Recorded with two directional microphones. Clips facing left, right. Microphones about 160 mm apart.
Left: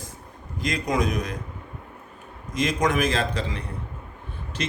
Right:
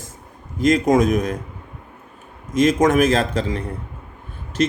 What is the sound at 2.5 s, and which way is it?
Speech, 45° right (ahead or behind).